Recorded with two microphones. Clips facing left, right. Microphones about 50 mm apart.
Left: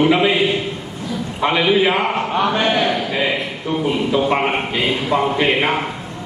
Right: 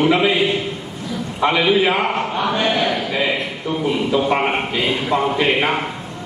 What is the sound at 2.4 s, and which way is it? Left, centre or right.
Speech, left.